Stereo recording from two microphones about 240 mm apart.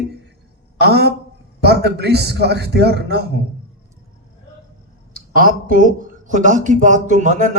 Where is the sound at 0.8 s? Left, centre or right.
Right.